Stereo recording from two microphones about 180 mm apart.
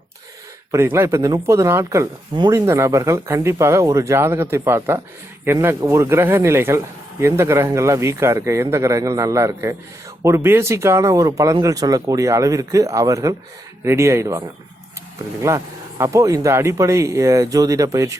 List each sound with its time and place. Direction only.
0.7 s speech: 15° right (ahead or behind)